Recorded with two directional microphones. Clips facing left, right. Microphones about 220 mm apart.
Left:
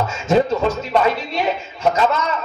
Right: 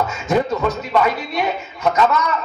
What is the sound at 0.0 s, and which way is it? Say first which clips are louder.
A man's voice: left 2 dB; 25° left (ahead or behind).